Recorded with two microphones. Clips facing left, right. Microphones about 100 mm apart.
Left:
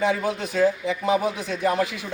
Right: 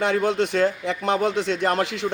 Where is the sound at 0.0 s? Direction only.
70° right (ahead or behind).